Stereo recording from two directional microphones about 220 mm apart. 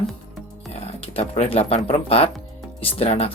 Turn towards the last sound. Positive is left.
turn(degrees=25)  # may be behind; listen again after turning